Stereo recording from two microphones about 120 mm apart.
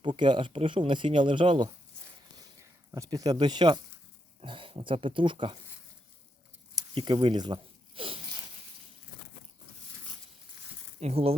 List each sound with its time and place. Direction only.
0.0 s speech: 40° right (ahead or behind)
2.4 s a sound: 25° right (ahead or behind)
4.4 s speech: 50° right (ahead or behind)
6.9 s speech: 40° right (ahead or behind)
11.0 s speech: 55° right (ahead or behind)